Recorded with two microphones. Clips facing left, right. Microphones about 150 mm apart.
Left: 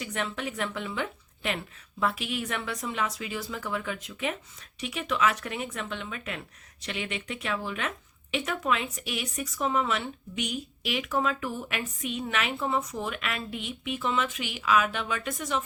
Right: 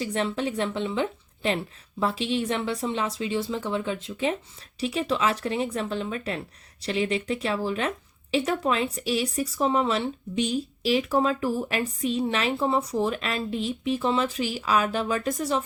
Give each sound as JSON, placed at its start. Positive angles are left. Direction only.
{"t": 0.0, "sound": "a woman's voice", "side_deg": -30}